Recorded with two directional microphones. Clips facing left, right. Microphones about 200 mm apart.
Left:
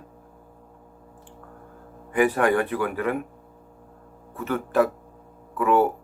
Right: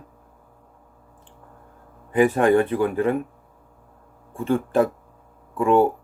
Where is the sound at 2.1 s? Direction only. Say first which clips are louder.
Right 3 dB; 25° right (ahead or behind).